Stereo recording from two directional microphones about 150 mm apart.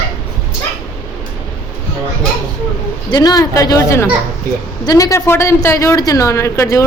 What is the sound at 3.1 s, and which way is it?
A woman's voice, 25° left (ahead or behind).